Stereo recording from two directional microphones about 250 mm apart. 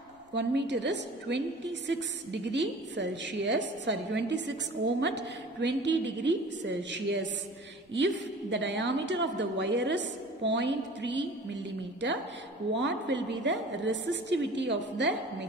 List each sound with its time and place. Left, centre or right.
0.3 s a woman's voice: right
8.5 s a woman's voice: right
12.7 s a woman's voice: right